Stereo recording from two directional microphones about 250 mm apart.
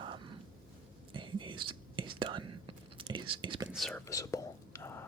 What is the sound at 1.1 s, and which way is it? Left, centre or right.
Whispering, centre.